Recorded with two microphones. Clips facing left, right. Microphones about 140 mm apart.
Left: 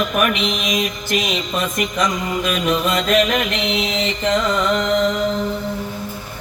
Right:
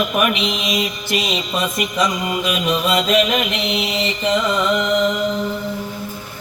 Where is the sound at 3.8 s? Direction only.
5° right (ahead or behind).